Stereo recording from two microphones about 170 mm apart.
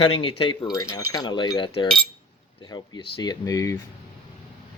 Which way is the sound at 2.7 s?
25° left (ahead or behind).